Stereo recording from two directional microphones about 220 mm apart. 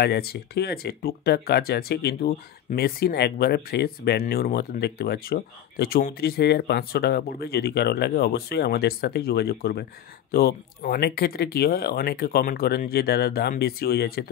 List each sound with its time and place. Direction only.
0.0 s speech: 45° left (ahead or behind)